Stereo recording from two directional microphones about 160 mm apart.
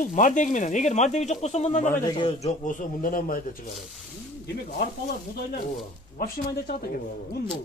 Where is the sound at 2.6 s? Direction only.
50° left (ahead or behind).